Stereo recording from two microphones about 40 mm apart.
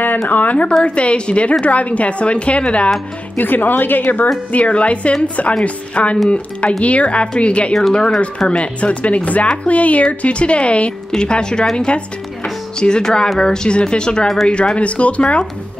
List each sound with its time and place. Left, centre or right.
0.0 s speech: left
0.8 s a woman's voice: left
3.3 s speech: left
4.5 s a woman's voice: left
10.2 s a woman's voice: left
14.2 s speech: centre
14.8 s a woman's voice: left